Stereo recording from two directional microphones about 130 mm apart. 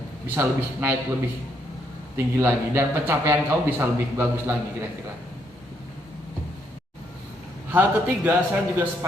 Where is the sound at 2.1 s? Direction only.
20° right (ahead or behind).